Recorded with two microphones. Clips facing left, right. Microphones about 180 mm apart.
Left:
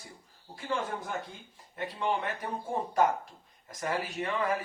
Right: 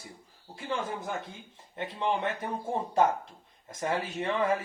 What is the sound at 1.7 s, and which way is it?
Speech, 25° right (ahead or behind).